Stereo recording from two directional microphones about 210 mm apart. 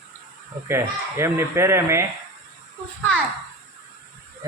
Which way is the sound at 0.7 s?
10° right (ahead or behind).